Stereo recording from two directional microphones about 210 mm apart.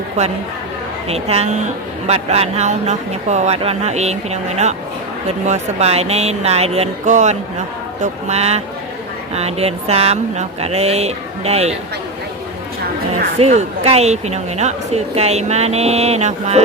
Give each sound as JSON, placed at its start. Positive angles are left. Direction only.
{"t": 0.2, "sound": "speech", "side_deg": -30}
{"t": 13.4, "sound": "speech", "side_deg": -30}